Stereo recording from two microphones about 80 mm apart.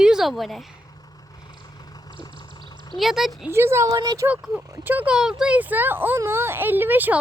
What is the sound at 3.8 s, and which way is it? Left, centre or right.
Speech, right.